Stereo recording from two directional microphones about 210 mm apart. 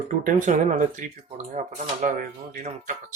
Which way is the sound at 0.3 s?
35° right (ahead or behind).